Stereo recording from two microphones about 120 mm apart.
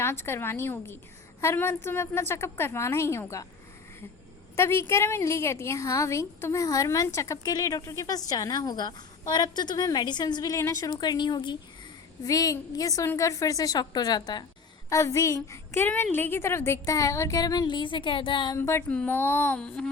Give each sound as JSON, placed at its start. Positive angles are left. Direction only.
{"t": 0.0, "sound": "a woman's voice", "side_deg": 20}
{"t": 4.5, "sound": "a woman's voice", "side_deg": 20}
{"t": 10.9, "sound": "a woman's voice", "side_deg": 40}
{"t": 18.5, "sound": "a woman's voice", "side_deg": 25}
{"t": 19.5, "sound": "speech", "side_deg": 5}